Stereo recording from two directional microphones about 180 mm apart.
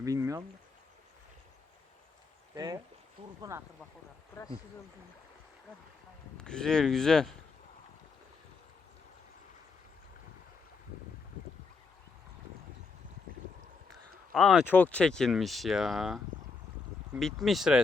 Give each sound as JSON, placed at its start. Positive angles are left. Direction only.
{"t": 0.0, "sound": "a sound", "side_deg": -20}
{"t": 2.6, "sound": "speech", "side_deg": -20}
{"t": 6.3, "sound": "speech", "side_deg": 5}
{"t": 14.3, "sound": "speech", "side_deg": 0}